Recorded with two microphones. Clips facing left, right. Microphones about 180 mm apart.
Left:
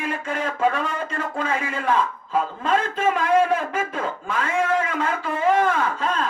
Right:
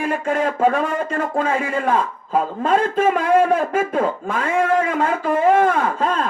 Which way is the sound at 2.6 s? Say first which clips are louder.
Right 6 dB; 50° right (ahead or behind).